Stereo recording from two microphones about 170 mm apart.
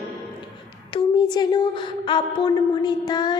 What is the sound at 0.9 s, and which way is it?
Speech, 25° left (ahead or behind).